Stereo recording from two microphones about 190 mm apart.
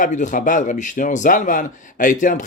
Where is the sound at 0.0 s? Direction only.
40° left (ahead or behind).